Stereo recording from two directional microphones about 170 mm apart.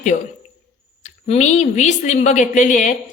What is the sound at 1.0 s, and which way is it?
A man's voice, 40° left (ahead or behind).